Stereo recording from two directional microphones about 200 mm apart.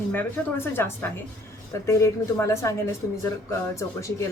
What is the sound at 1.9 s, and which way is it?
A woman's voice, 15° left (ahead or behind).